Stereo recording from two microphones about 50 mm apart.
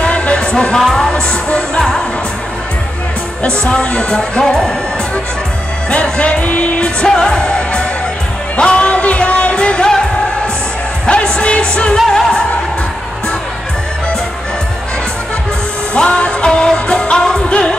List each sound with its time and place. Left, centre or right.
0.0 s music: left
0.7 s speech: centre
3.4 s speech: left
6.0 s music: left
7.0 s music: centre
15.9 s music: left